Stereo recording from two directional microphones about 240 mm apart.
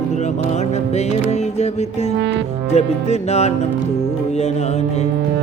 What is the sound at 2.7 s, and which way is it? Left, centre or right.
Mantra, left.